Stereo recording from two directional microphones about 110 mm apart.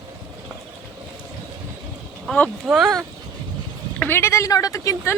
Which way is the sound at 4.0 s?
20° left (ahead or behind).